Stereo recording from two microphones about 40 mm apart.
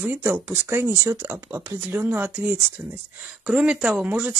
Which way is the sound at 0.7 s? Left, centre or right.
Right.